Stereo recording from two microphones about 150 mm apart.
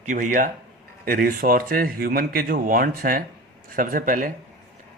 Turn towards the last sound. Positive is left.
turn(degrees=-65)  # may be behind; listen again after turning